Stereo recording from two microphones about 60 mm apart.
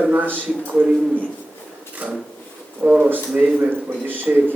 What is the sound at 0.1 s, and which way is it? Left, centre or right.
A man's voice, right.